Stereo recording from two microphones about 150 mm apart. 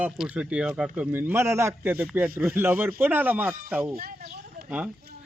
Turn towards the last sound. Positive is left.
turn(degrees=-85)